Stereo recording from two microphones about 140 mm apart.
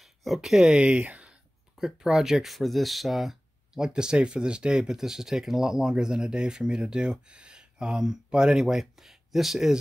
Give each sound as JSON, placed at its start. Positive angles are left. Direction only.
{"t": 0.0, "sound": "speech", "side_deg": 0}